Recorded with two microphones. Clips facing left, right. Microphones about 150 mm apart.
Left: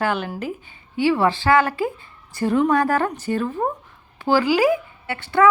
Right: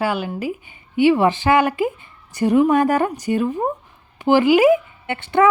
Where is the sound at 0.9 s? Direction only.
15° right (ahead or behind).